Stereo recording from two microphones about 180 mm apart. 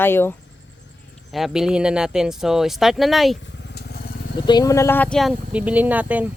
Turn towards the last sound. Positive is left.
turn(degrees=-10)  # may be behind; listen again after turning